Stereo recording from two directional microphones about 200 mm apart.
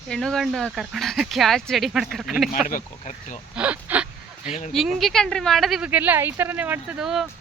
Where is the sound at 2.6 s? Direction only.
40° left (ahead or behind).